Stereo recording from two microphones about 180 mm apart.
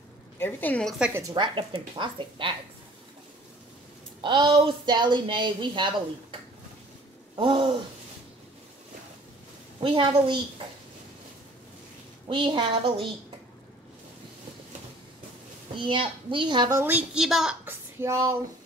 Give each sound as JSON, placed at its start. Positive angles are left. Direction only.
{"t": 0.4, "sound": "a woman's voice", "side_deg": 10}
{"t": 0.9, "sound": "a woman's voice", "side_deg": -5}
{"t": 1.3, "sound": "speech", "side_deg": -25}
{"t": 4.2, "sound": "speech", "side_deg": -25}
{"t": 7.3, "sound": "speech", "side_deg": -30}
{"t": 9.8, "sound": "speech", "side_deg": -25}
{"t": 12.3, "sound": "speech", "side_deg": -25}
{"t": 15.7, "sound": "speech", "side_deg": -30}
{"t": 16.8, "sound": "a woman's voice", "side_deg": -5}
{"t": 18.0, "sound": "speech", "side_deg": -15}